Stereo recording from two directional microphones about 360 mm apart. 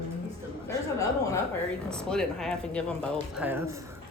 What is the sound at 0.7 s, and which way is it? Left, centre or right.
A child's voice, centre.